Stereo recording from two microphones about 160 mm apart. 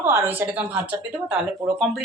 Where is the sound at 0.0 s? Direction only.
15° right (ahead or behind).